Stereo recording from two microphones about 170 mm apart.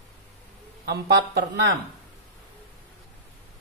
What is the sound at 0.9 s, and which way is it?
Speech, 70° right (ahead or behind).